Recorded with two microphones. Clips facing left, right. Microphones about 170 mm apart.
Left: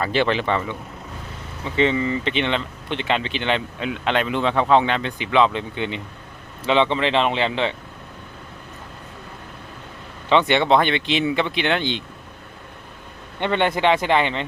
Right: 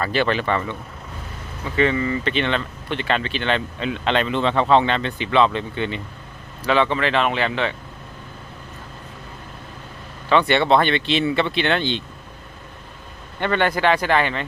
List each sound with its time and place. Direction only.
0.0 s speech: 20° left (ahead or behind)
10.2 s speech: 20° left (ahead or behind)
13.4 s speech: 20° left (ahead or behind)